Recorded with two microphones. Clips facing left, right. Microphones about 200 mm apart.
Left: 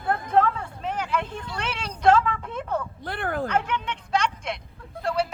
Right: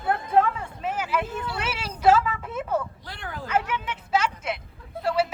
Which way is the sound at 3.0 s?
55° left (ahead or behind).